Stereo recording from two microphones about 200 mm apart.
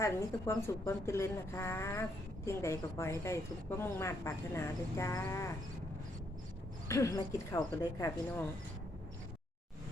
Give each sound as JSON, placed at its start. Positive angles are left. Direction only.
{"t": 0.0, "sound": "a woman's voice", "side_deg": 15}
{"t": 6.8, "sound": "a woman's voice", "side_deg": 15}